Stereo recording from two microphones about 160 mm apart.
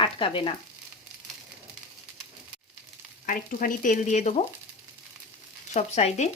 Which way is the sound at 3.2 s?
60° left (ahead or behind).